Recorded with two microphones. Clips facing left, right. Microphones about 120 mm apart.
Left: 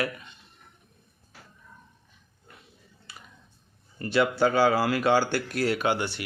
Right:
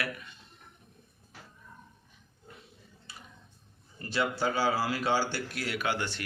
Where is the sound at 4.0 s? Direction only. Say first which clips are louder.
Left 8 dB; 65° left (ahead or behind).